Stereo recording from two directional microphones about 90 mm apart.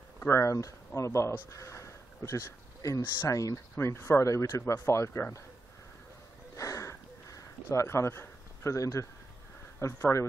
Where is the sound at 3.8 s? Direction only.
30° left (ahead or behind).